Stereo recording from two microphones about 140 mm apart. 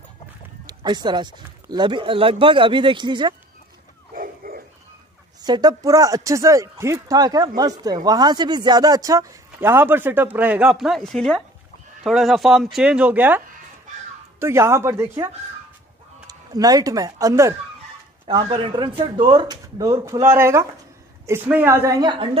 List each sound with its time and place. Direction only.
0.7 s speech: 30° right (ahead or behind)
4.1 s a sound: 90° right
5.4 s speech: 30° right (ahead or behind); by 13.4 s 10° right (ahead or behind)
14.4 s speech: 20° right (ahead or behind)
16.3 s speech: 25° right (ahead or behind)
18.2 s speech: 35° right (ahead or behind)